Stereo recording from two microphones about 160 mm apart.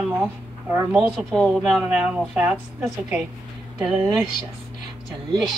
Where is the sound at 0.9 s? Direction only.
5° left (ahead or behind).